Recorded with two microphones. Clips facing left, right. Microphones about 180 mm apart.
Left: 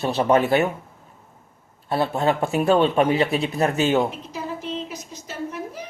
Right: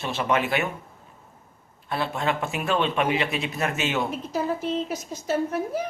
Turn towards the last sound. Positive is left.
turn(degrees=-50)  # may be behind; listen again after turning